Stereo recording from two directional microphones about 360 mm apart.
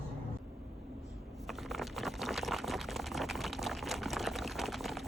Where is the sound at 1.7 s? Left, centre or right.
Centre.